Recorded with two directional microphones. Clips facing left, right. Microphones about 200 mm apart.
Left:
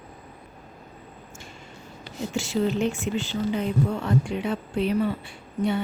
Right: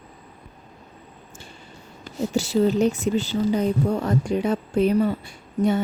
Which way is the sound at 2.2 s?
40° right (ahead or behind).